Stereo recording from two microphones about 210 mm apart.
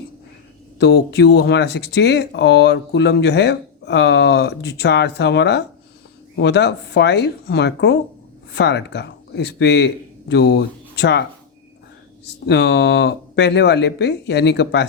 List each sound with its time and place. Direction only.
0.8 s speech: 50° left (ahead or behind)
12.2 s speech: 55° left (ahead or behind)